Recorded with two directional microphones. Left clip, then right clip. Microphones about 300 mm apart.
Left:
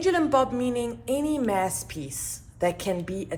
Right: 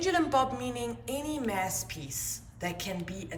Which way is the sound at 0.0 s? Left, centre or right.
Centre.